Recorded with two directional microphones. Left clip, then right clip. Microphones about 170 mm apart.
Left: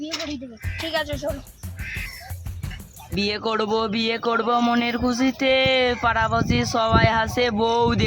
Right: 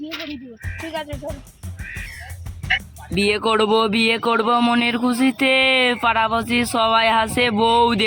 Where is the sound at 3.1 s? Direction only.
15° right (ahead or behind).